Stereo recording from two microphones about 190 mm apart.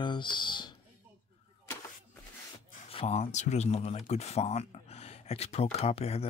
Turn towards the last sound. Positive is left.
turn(degrees=30)  # may be behind; listen again after turning